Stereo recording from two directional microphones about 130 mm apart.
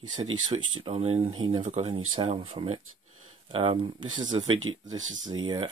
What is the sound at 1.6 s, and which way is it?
Speech, 65° right (ahead or behind).